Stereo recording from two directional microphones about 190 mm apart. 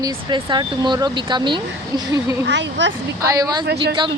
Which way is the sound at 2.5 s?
70° right (ahead or behind).